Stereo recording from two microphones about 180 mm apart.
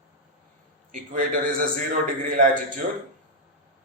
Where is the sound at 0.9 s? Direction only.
50° right (ahead or behind).